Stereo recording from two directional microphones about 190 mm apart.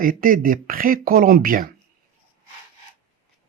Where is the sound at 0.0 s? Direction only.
45° right (ahead or behind).